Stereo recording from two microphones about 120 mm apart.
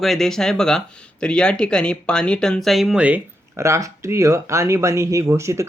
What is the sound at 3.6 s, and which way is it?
Speech, 25° right (ahead or behind).